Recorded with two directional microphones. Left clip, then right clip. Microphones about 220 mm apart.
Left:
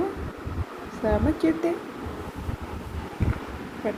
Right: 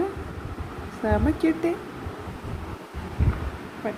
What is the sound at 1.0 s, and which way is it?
Speech, 30° right (ahead or behind).